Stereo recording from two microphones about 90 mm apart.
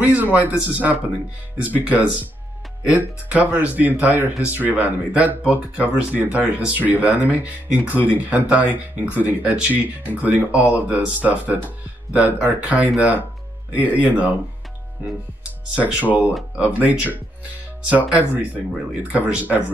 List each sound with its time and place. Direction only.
0.0 s speech: 15° right (ahead or behind)
15.7 s speech: 15° right (ahead or behind)